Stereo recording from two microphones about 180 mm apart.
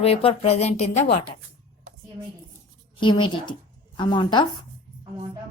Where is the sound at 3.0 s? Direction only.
25° left (ahead or behind).